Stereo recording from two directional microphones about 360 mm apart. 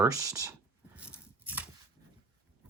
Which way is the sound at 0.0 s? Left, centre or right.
Centre.